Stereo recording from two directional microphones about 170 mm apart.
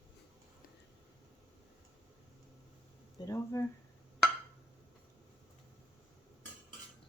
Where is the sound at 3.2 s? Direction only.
15° left (ahead or behind).